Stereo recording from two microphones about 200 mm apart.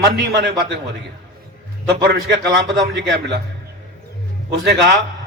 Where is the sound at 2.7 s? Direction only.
60° right (ahead or behind).